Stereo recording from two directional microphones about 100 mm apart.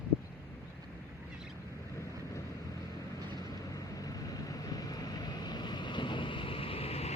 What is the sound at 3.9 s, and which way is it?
Vehicle, 35° left (ahead or behind).